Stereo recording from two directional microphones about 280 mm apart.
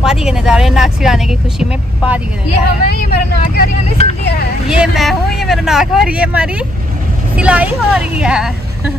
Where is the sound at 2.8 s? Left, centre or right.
Left.